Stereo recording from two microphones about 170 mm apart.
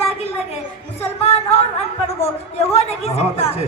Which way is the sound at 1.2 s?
40° left (ahead or behind).